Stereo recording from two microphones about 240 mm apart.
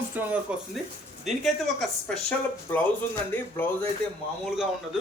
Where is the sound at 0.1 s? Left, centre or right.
Centre.